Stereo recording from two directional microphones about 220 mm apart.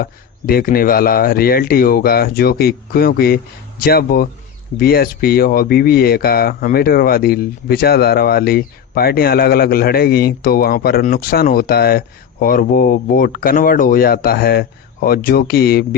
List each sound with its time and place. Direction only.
0.0 s speech: 40° left (ahead or behind)